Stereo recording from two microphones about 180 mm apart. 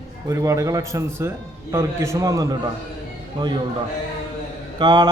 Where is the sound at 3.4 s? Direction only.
20° right (ahead or behind).